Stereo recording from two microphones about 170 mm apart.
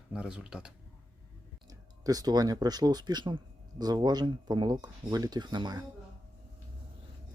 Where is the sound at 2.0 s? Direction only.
20° right (ahead or behind).